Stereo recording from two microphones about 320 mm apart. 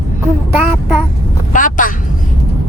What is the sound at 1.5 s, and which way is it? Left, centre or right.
Speech, left.